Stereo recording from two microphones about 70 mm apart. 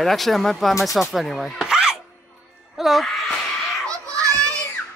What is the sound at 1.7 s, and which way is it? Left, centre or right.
Music, centre.